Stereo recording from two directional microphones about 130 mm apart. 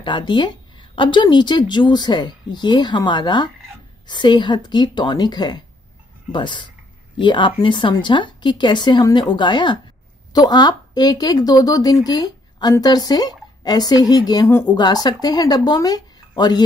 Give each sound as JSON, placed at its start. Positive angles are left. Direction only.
{"t": 0.0, "sound": "a woman's voice", "side_deg": 35}